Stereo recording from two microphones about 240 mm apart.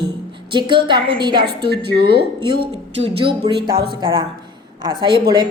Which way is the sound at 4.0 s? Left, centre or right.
Right.